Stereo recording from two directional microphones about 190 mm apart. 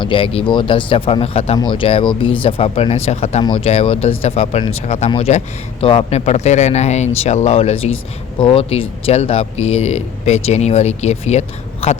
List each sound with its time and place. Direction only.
0.0 s speech: 25° left (ahead or behind)